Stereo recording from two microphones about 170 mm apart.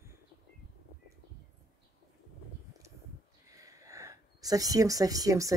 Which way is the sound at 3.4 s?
20° right (ahead or behind).